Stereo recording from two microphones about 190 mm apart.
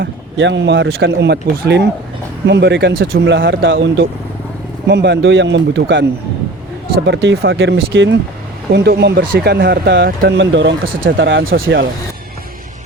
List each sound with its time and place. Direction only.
0.0 s speech: 70° right (ahead or behind)
1.0 s speech: 65° right (ahead or behind)
3.3 s speech: 80° right
4.9 s speech: 65° right (ahead or behind)
11.4 s speech: 50° right (ahead or behind)